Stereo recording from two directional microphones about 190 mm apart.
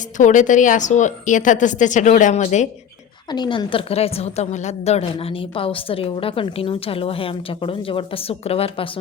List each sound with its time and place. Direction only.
0.2 s a woman's voice: 40° left (ahead or behind)
3.2 s a woman's voice: 20° left (ahead or behind)